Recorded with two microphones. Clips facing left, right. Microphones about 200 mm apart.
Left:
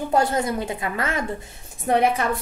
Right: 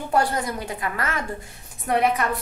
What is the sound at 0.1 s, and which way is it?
A woman's voice, 25° left (ahead or behind).